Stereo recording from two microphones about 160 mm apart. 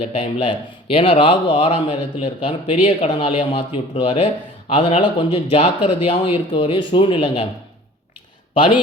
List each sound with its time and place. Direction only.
0.0 s speech: 35° left (ahead or behind)